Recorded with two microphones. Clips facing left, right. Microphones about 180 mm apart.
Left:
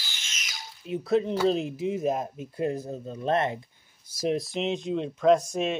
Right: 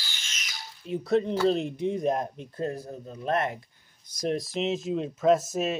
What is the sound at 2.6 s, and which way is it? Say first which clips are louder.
Speech: left 3 dB; 20° left (ahead or behind).